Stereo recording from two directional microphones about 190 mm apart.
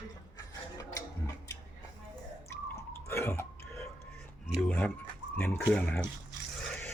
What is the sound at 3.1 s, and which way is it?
Burping, 15° left (ahead or behind).